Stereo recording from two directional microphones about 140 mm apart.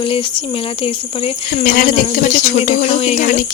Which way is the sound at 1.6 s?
80° left.